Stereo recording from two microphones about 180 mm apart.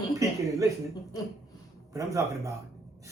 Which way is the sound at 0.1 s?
20° right (ahead or behind).